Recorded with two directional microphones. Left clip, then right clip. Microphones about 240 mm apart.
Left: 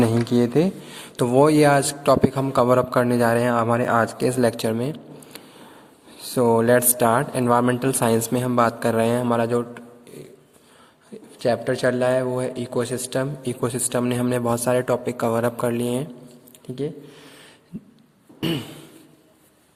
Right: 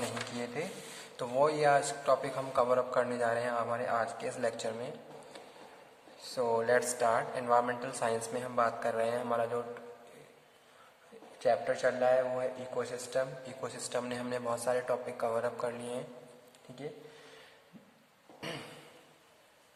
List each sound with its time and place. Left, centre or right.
0.3 s a man's voice: left
6.3 s a man's voice: left
11.3 s a man's voice: left
18.3 s a sound: left